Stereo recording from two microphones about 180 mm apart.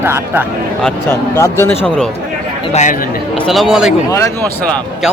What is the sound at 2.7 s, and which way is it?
Speech, 40° left (ahead or behind).